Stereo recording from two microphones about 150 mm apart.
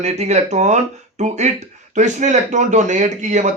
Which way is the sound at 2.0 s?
50° right (ahead or behind).